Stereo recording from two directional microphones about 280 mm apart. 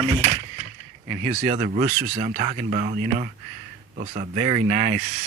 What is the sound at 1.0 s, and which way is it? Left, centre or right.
Speech, right.